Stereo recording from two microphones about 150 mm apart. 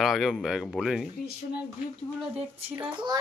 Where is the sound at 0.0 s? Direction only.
Centre (ahead or behind).